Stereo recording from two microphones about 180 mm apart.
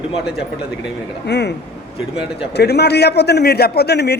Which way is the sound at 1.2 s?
70° left (ahead or behind).